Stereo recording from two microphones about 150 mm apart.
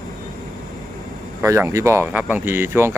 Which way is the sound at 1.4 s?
20° right (ahead or behind).